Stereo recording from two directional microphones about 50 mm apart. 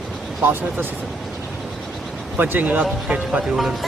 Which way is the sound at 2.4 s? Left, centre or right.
Right.